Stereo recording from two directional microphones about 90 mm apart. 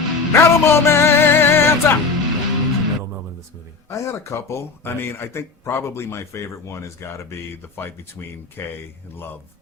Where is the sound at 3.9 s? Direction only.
30° left (ahead or behind).